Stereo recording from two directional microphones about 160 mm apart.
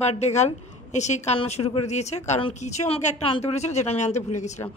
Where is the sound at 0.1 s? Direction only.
45° left (ahead or behind).